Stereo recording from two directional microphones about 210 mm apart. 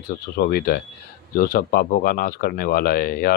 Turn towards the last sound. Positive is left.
turn(degrees=45)  # may be behind; listen again after turning